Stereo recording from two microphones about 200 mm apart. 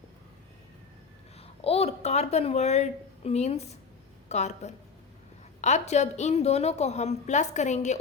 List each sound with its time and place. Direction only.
1.4 s a woman's voice: 30° left (ahead or behind)